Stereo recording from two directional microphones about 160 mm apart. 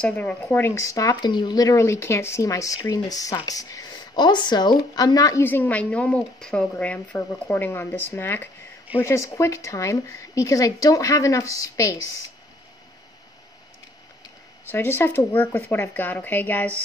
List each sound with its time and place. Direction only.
0.0 s speech: 10° left (ahead or behind)
14.7 s speech: 15° left (ahead or behind)